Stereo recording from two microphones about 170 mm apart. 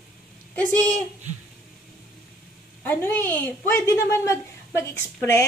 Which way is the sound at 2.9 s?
10° left (ahead or behind).